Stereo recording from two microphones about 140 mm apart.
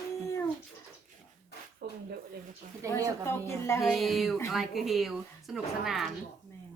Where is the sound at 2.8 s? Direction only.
20° right (ahead or behind).